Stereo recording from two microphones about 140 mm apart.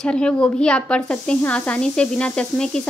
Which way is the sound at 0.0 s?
5° left (ahead or behind).